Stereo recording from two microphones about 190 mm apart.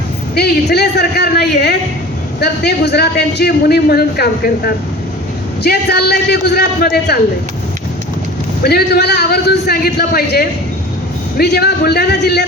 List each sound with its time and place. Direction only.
0.3 s a man's voice: 60° left (ahead or behind)
8.6 s a man's voice: 55° left (ahead or behind)